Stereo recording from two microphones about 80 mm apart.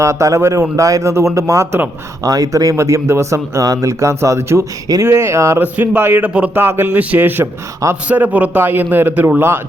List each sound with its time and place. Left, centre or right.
0.0 s speech: right
5.5 s speech: right